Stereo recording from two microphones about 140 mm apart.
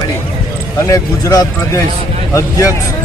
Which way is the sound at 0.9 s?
25° left (ahead or behind).